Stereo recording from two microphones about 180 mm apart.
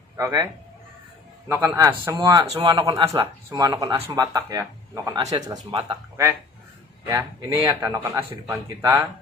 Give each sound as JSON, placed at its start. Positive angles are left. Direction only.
{"t": 0.2, "sound": "speech", "side_deg": -20}
{"t": 1.5, "sound": "speech", "side_deg": -15}